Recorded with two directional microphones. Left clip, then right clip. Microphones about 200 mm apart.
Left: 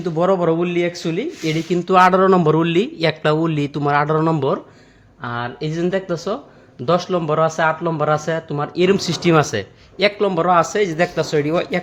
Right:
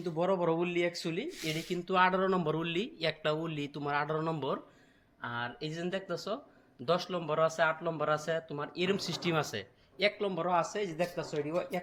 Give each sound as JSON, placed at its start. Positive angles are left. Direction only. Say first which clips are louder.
{"t": 0.0, "sound": "speech", "louder": "left 14 dB", "side_deg": 25}